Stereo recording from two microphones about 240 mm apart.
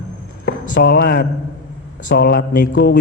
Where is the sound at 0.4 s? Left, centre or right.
Left.